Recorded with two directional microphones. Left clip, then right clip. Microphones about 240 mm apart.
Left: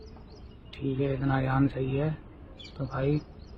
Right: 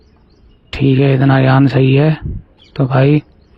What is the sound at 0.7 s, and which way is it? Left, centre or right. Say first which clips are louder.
Speech: right 17 dB; right.